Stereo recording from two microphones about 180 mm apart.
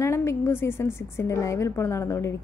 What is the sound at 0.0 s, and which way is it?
A woman's voice, 15° left (ahead or behind).